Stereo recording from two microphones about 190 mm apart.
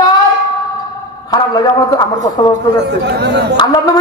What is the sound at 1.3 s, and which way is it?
A man's voice, 20° left (ahead or behind).